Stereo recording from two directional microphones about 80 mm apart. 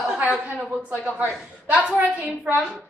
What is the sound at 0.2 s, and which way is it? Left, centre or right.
A woman's voice, centre.